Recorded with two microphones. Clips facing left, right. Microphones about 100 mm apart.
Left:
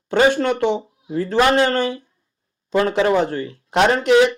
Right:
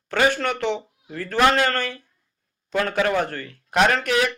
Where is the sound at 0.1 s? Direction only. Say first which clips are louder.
Left 5 dB; 25° left (ahead or behind).